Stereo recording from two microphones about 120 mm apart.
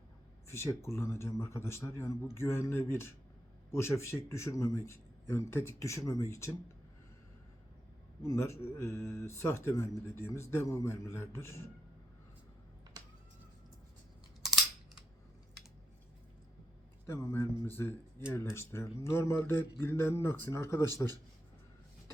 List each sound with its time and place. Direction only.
0.4 s speech: 20° left (ahead or behind)
8.3 s speech: 25° left (ahead or behind)
14.4 s a sound: 5° right (ahead or behind)
17.1 s speech: 20° left (ahead or behind)